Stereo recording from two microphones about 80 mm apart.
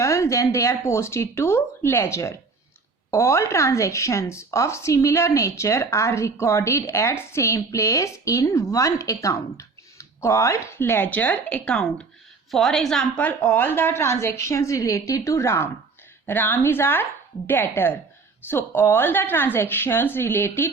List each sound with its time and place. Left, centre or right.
0.0 s a woman's voice: left; by 13.2 s centre
13.2 s speech: left
16.2 s speech: left